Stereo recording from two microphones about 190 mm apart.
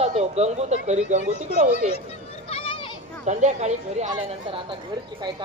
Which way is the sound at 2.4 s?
30° left (ahead or behind).